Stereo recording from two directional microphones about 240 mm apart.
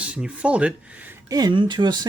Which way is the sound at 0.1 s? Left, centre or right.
Centre.